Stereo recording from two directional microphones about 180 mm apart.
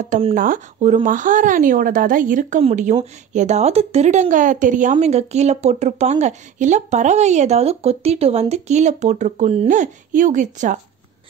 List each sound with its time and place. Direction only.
0.3 s a woman's voice: 50° right (ahead or behind)